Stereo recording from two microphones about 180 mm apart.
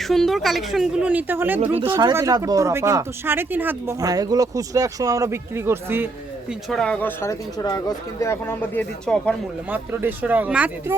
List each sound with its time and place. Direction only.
0.0 s speech: centre (ahead or behind)
1.9 s speech: 25° right (ahead or behind)
6.5 s speech: centre (ahead or behind)
9.6 s speech: 10° right (ahead or behind)